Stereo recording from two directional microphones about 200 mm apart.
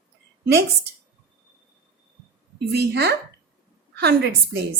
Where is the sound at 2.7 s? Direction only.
55° right (ahead or behind).